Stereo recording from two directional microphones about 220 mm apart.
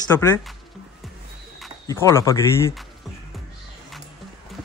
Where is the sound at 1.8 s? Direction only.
15° left (ahead or behind).